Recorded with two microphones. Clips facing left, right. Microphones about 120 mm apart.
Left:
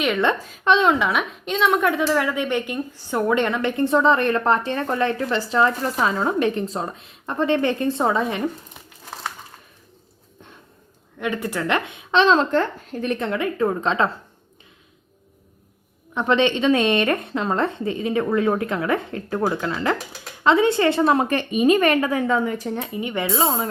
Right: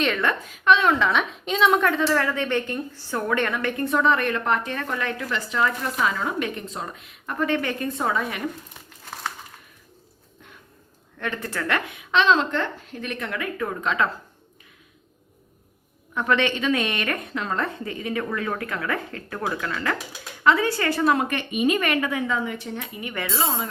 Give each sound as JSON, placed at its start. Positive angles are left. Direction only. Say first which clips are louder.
{"t": 0.2, "sound": "a woman's voice", "louder": "left 4 dB", "side_deg": 25}
{"t": 1.0, "sound": "a woman's voice", "louder": "even", "side_deg": 5}
{"t": 1.9, "sound": "a woman's voice", "louder": "left 2 dB", "side_deg": 15}
{"t": 11.2, "sound": "a woman's voice", "louder": "left 4 dB", "side_deg": 15}
{"t": 16.1, "sound": "a woman's voice", "louder": "left 4 dB", "side_deg": 20}
{"t": 23.0, "sound": "a woman's voice", "louder": "left 5 dB", "side_deg": 25}